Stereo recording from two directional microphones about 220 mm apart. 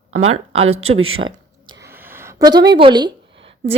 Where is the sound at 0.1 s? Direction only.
65° right (ahead or behind).